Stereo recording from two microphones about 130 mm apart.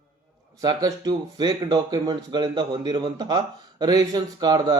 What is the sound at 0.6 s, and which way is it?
A man's voice, 30° right (ahead or behind).